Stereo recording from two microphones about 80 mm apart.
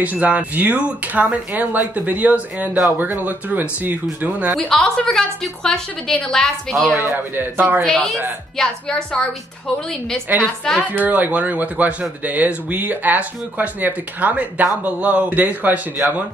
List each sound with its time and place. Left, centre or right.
0.0 s speech: centre
4.5 s a woman's voice: centre
7.1 s speech: right
7.8 s a woman's voice: centre
10.8 s speech: right